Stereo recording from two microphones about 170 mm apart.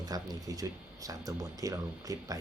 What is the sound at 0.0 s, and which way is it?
Speech, 20° right (ahead or behind).